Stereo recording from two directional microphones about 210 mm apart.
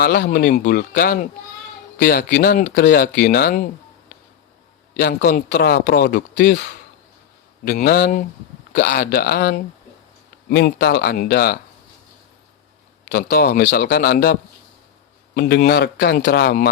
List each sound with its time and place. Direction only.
0.0 s a man's voice: 50° left (ahead or behind)
4.9 s a man's voice: 45° left (ahead or behind)
7.8 s a man's voice: 45° left (ahead or behind)
13.1 s a man's voice: 50° left (ahead or behind)
15.4 s a man's voice: 50° left (ahead or behind)